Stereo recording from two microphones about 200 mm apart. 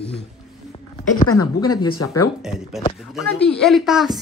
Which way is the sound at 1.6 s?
20° left (ahead or behind).